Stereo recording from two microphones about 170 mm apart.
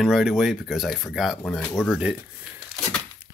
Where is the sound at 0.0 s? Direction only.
Centre (ahead or behind).